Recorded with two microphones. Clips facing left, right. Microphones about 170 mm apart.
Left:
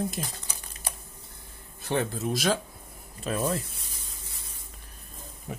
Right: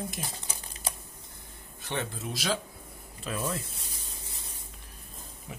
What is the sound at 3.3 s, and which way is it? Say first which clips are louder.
Speech: left 5 dB; 35° left (ahead or behind).